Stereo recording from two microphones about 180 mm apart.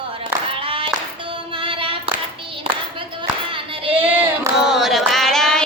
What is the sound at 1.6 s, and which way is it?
Child singing, 30° right (ahead or behind).